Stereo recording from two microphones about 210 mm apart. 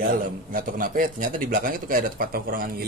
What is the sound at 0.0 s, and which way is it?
Speech, 40° right (ahead or behind).